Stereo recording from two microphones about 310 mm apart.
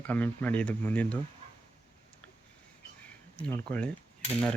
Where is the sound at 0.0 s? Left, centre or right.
Centre.